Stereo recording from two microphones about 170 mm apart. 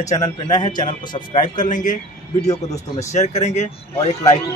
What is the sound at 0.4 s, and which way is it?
Speech, 25° left (ahead or behind).